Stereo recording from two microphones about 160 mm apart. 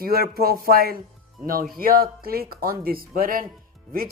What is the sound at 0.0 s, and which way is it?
Speech, 70° right (ahead or behind).